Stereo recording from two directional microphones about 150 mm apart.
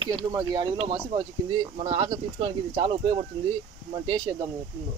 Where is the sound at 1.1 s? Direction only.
30° right (ahead or behind).